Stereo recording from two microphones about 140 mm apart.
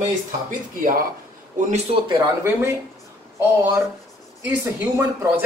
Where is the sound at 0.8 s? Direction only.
80° right.